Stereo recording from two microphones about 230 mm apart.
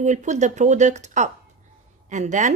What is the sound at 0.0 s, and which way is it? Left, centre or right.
A woman's voice, right.